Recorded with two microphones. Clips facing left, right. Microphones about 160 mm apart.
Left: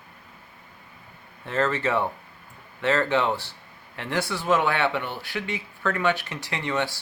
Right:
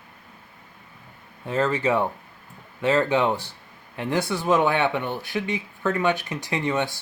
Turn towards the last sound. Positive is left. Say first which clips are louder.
# right 3 dB
turn(degrees=-20)  # may be behind; listen again after turning